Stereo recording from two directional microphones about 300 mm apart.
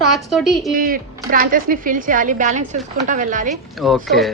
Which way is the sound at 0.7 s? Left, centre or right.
Right.